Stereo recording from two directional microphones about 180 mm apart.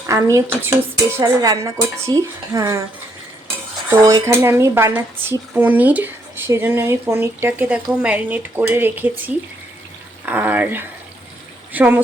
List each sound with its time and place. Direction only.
0.1 s speech: 15° right (ahead or behind)
3.8 s speech: 20° right (ahead or behind)